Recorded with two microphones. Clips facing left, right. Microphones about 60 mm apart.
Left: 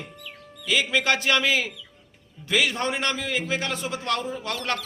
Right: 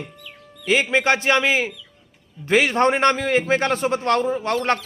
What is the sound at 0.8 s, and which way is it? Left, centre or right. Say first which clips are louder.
Speech: right 4 dB; right.